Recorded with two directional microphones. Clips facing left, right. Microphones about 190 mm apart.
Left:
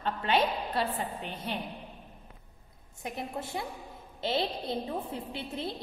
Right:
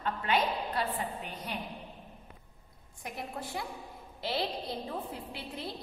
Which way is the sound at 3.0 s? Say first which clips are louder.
Left 3 dB; 25° left (ahead or behind).